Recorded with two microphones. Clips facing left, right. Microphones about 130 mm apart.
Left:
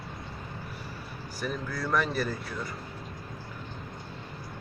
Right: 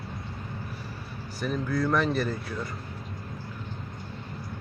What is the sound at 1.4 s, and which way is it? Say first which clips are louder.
Speech: right 6 dB; 5° left (ahead or behind).